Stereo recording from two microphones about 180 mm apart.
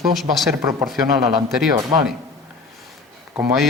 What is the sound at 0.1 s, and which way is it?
Speech, centre (ahead or behind).